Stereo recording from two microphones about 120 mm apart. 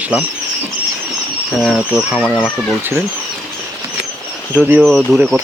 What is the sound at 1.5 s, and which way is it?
Speech, centre (ahead or behind).